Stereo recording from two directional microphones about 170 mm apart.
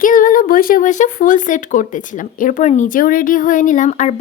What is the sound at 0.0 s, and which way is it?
Speech, 55° left (ahead or behind).